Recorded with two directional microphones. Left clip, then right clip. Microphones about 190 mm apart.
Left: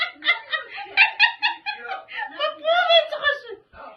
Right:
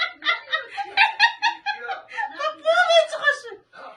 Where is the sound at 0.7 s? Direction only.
5° right (ahead or behind).